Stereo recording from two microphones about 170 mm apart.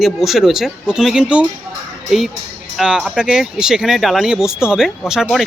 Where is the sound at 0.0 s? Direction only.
Centre (ahead or behind).